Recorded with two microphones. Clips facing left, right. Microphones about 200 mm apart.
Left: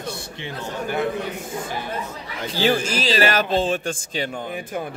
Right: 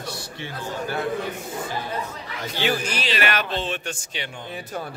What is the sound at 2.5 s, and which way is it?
Speech, 35° left (ahead or behind).